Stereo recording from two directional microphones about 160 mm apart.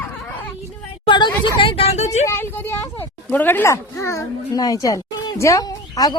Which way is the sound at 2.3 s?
15° left (ahead or behind).